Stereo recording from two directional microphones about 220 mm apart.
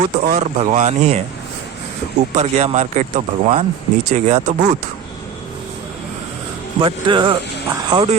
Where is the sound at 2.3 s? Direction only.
30° right (ahead or behind).